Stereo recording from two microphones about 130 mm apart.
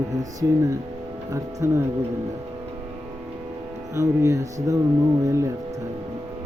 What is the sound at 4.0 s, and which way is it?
Speech, 25° right (ahead or behind).